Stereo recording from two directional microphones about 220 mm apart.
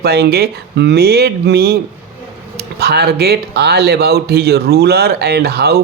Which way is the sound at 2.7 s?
45° right (ahead or behind).